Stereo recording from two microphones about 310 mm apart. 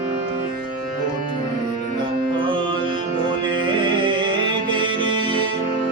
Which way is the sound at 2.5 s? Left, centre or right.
Centre.